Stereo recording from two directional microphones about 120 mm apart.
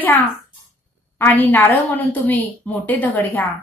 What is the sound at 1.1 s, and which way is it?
A woman's voice, 15° left (ahead or behind).